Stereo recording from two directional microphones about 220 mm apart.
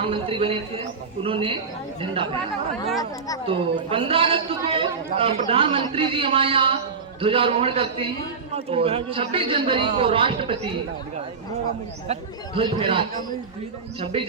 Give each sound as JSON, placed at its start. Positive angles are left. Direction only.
{"t": 0.0, "sound": "a man's voice", "side_deg": -25}
{"t": 3.4, "sound": "a man's voice", "side_deg": -25}
{"t": 12.5, "sound": "a man's voice", "side_deg": -25}